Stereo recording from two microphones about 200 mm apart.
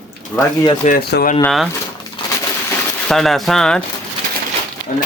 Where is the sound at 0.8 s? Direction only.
50° left (ahead or behind).